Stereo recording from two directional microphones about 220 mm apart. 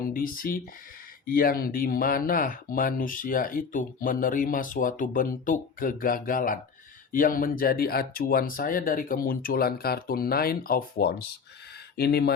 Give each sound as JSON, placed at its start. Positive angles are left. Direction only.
{"t": 0.1, "sound": "speech", "side_deg": 40}